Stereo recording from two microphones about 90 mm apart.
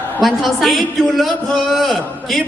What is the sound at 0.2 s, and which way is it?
Speech, centre (ahead or behind).